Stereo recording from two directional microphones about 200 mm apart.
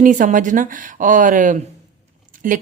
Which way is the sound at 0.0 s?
40° right (ahead or behind).